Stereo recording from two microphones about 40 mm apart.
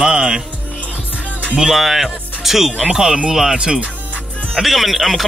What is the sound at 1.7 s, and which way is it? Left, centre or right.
Speech, centre.